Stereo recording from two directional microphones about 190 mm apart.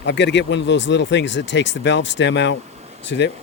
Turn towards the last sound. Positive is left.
turn(degrees=70)  # may be behind; listen again after turning